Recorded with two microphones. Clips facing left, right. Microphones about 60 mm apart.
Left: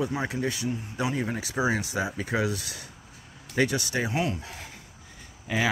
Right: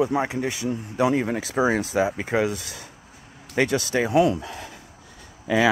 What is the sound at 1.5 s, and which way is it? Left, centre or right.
Speech, right.